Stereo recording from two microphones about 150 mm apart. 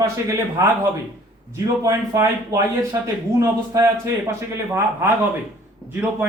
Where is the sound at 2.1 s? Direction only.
20° right (ahead or behind).